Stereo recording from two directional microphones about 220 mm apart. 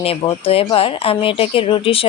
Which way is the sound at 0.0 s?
25° left (ahead or behind).